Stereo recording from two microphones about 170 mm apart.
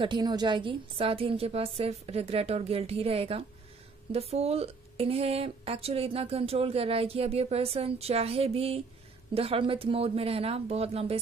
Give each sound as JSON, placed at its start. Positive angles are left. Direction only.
{"t": 0.0, "sound": "speech", "side_deg": -25}